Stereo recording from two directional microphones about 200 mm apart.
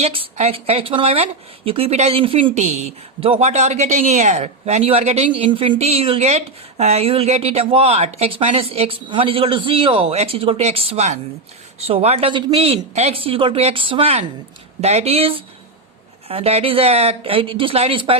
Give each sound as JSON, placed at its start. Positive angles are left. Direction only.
{"t": 0.0, "sound": "speech", "side_deg": -30}